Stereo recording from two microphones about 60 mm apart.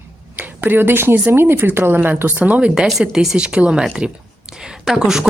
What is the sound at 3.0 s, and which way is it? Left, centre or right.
Speech, centre.